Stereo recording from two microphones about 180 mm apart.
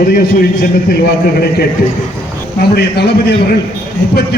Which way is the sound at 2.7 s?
65° left (ahead or behind).